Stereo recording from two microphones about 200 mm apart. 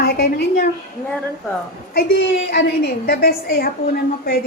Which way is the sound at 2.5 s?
50° left (ahead or behind).